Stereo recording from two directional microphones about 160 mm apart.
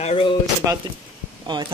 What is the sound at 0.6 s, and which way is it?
Speech, 15° right (ahead or behind).